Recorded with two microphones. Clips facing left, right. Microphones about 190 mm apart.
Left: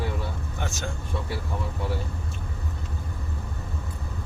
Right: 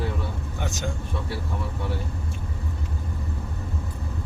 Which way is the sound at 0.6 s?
15° right (ahead or behind).